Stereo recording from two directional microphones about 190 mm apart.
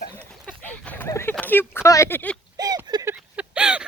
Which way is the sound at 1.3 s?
10° left (ahead or behind).